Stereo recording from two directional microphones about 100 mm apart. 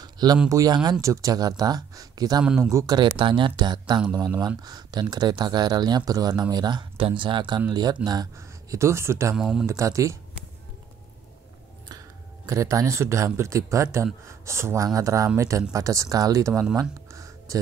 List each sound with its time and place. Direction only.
0.0 s a sound: 40° right (ahead or behind)
0.5 s speech: 35° right (ahead or behind)
2.4 s speech: 5° right (ahead or behind)
2.9 s speech: 50° right (ahead or behind)
8.4 s speech: 25° right (ahead or behind)
9.4 s speech: 5° right (ahead or behind)
9.7 s speech: 30° right (ahead or behind)
12.4 s speech: 35° right (ahead or behind)
17.1 s a sound: 30° right (ahead or behind)